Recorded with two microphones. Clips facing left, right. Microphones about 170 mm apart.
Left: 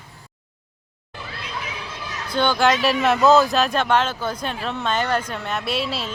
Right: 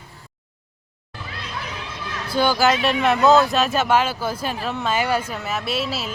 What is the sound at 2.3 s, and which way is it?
Speech, 5° right (ahead or behind).